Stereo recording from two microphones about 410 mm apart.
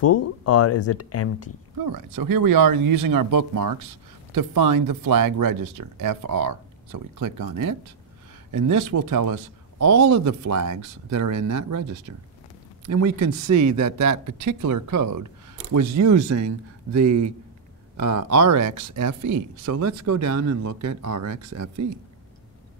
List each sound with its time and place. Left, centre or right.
0.0 s speech: left
1.9 s speech: right